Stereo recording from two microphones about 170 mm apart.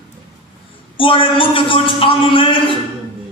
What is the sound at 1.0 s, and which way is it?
A man's voice, 30° left (ahead or behind).